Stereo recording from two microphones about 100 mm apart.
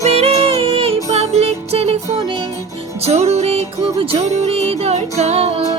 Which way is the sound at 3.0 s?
90° right.